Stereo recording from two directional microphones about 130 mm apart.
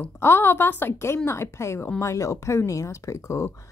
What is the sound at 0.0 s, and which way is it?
A woman's voice, 20° left (ahead or behind).